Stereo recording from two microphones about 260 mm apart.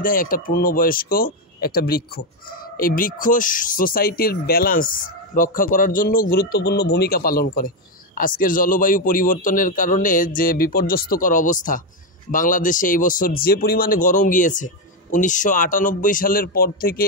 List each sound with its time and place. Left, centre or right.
0.0 s speech: left